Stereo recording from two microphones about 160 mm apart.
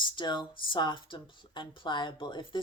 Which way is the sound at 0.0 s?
30° left (ahead or behind).